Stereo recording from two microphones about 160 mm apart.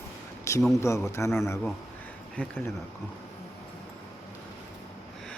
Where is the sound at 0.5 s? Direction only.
20° left (ahead or behind).